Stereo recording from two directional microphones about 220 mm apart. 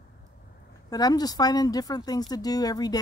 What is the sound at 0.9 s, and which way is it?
Speech, 15° left (ahead or behind).